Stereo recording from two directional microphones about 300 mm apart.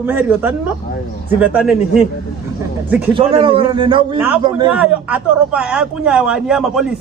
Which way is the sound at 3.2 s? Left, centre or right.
Centre.